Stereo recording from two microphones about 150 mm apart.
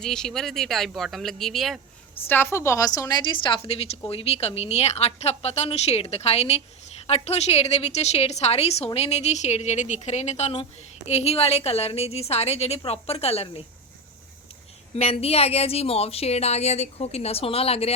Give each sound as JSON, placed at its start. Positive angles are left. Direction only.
{"t": 0.0, "sound": "speech", "side_deg": 5}
{"t": 2.2, "sound": "a woman's voice", "side_deg": 15}
{"t": 14.9, "sound": "a woman's voice", "side_deg": 40}